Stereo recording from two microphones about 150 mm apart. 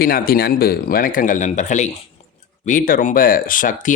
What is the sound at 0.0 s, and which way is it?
Speech, 85° left.